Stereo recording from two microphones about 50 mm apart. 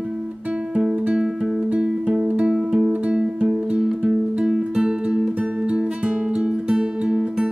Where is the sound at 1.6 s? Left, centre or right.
Right.